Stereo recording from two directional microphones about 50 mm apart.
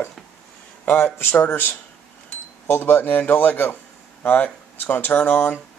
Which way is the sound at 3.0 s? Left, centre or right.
Left.